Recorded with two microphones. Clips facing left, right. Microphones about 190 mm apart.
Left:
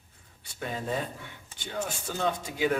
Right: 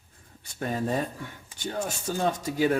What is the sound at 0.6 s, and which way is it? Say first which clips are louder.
Speech: right 4 dB; 45° right (ahead or behind).